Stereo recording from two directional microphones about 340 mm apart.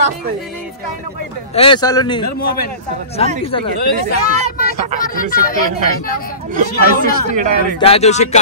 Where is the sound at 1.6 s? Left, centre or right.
Centre.